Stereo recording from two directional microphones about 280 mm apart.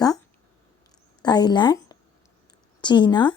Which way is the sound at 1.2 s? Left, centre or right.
Centre.